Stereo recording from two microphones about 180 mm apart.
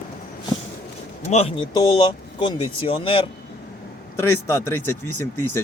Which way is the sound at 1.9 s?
25° left (ahead or behind).